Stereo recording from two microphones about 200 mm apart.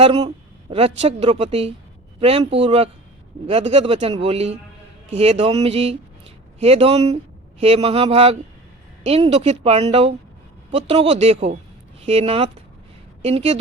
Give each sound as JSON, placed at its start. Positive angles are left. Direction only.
{"t": 0.0, "sound": "a woman's voice", "side_deg": -30}